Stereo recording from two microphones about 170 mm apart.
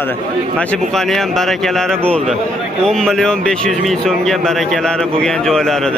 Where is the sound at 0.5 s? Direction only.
Centre (ahead or behind).